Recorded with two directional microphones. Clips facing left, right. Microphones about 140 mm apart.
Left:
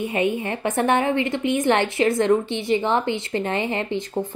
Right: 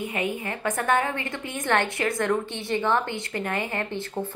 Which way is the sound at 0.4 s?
25° left (ahead or behind).